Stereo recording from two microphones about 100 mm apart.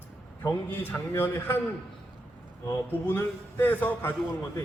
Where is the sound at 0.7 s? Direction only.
20° left (ahead or behind).